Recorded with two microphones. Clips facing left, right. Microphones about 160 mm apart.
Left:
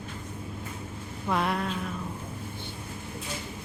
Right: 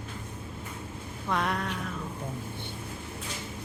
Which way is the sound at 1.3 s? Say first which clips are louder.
Left 2 dB; 5° left (ahead or behind).